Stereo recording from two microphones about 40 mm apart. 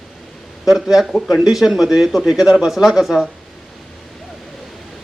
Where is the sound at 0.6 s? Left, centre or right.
Centre.